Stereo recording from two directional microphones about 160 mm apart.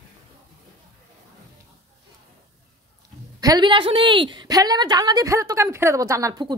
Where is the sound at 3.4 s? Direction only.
25° right (ahead or behind).